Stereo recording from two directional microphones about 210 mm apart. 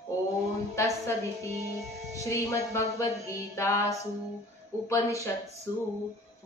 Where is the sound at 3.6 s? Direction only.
15° left (ahead or behind).